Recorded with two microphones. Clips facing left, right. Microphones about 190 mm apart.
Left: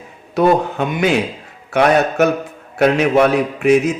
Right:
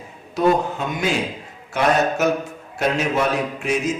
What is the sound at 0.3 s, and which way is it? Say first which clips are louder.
A man's voice: left 4 dB; 65° left (ahead or behind).